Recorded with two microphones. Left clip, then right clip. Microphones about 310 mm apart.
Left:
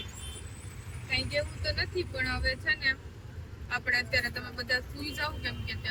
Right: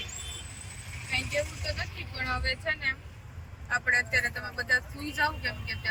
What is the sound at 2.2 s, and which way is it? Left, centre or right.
Speech, centre.